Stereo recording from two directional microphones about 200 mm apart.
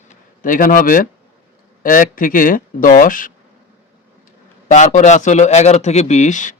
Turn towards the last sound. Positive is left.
turn(degrees=40)  # may be behind; listen again after turning